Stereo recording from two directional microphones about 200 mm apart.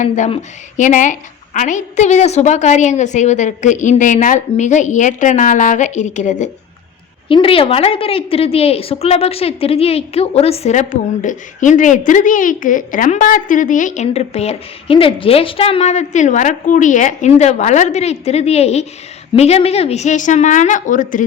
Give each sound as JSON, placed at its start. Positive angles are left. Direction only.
{"t": 0.0, "sound": "a woman's voice", "side_deg": 35}